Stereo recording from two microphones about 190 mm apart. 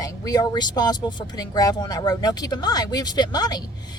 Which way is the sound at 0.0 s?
20° left (ahead or behind).